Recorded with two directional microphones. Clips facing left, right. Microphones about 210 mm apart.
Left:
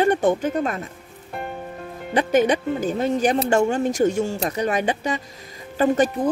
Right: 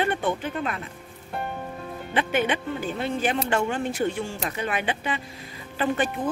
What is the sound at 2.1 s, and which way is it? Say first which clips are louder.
Speech: left 6 dB; 40° left (ahead or behind).